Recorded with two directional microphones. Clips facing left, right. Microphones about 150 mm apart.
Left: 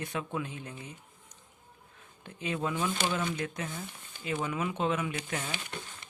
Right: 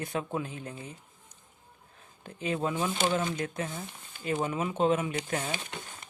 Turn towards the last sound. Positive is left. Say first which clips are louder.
# right 4 dB
turn(degrees=-35)  # may be behind; listen again after turning